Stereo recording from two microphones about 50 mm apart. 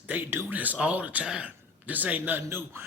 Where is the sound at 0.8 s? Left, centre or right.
Right.